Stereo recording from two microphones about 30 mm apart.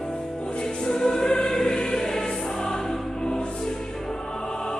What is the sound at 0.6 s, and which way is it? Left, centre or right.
Music, left.